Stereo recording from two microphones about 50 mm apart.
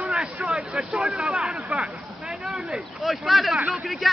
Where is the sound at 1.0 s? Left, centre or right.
Centre.